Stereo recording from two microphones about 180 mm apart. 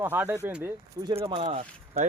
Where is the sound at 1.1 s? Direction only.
30° right (ahead or behind).